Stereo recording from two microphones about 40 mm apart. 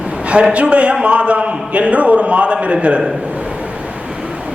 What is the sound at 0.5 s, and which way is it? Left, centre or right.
Speech, right.